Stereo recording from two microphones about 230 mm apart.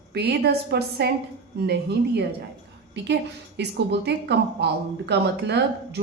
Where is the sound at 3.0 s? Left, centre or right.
Right.